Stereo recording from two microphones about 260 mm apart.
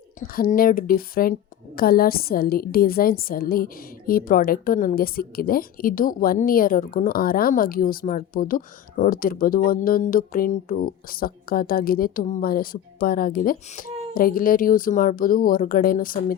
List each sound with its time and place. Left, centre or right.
0.3 s a woman's voice: left